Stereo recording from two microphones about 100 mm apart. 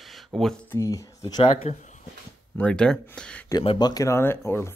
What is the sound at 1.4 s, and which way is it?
Speech, 85° left.